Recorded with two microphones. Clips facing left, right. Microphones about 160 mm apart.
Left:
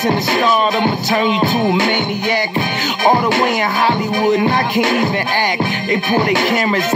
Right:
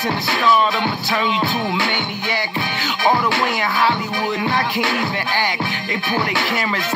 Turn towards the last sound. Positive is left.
turn(degrees=45)  # may be behind; listen again after turning